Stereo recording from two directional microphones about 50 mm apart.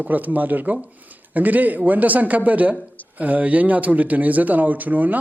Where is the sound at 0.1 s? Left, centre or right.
Right.